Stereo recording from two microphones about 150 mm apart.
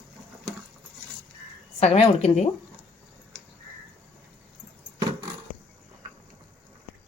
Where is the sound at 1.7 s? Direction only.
45° left (ahead or behind).